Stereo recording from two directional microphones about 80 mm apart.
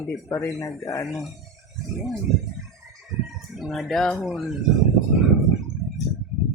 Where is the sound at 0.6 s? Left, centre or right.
Left.